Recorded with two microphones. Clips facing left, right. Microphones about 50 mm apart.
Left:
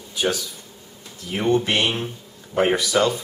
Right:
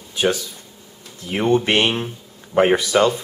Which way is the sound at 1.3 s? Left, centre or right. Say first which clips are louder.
Right 3 dB; right.